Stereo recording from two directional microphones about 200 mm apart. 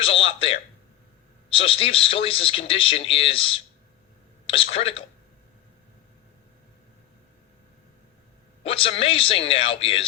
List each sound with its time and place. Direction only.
0.0 s a man's voice: 30° left (ahead or behind)
8.6 s a man's voice: 30° left (ahead or behind)